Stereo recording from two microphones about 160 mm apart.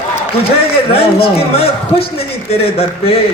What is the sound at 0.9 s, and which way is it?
A man's voice, 40° left (ahead or behind).